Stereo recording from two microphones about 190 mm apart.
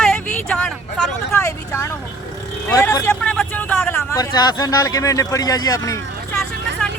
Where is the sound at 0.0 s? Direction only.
5° left (ahead or behind).